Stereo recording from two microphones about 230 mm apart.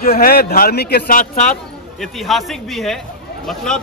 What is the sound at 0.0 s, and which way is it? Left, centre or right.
A man's voice, left.